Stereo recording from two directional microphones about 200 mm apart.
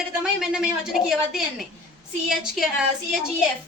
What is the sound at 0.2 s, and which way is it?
A woman's voice, 5° right (ahead or behind).